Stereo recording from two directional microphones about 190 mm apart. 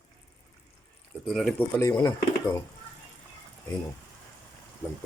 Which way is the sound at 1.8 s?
15° left (ahead or behind).